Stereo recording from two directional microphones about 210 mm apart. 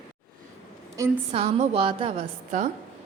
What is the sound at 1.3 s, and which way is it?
Speech, 30° right (ahead or behind).